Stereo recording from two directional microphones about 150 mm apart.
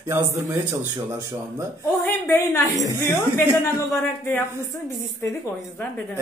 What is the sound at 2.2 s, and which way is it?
A woman's voice, 20° left (ahead or behind).